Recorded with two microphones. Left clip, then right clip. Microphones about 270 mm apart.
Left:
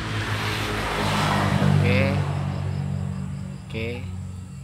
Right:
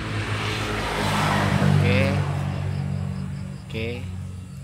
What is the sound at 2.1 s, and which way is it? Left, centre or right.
Vehicle, right.